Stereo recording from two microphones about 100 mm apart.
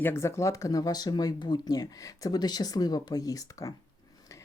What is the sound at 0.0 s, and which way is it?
A woman's voice, 25° left (ahead or behind).